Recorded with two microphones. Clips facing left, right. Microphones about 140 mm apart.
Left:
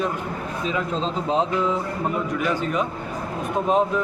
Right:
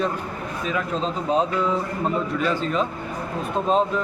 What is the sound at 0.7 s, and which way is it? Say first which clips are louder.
Speech: even; 20° left (ahead or behind).